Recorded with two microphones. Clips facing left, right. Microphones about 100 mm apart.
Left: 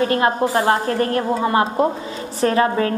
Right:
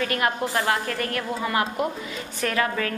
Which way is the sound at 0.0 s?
30° left (ahead or behind).